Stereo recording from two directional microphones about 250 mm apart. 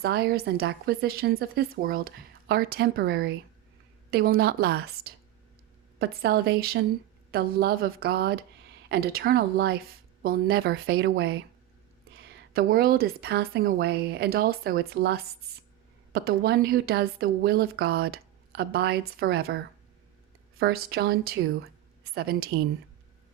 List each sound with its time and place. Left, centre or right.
0.0 s a woman's voice: right
20.6 s a woman's voice: right